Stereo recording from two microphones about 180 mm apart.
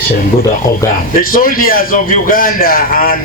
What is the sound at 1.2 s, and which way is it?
A man's voice, 50° left (ahead or behind).